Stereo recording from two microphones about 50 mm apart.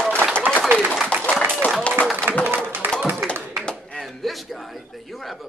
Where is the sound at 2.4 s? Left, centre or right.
Right.